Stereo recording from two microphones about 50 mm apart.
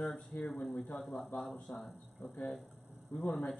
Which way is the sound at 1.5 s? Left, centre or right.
Left.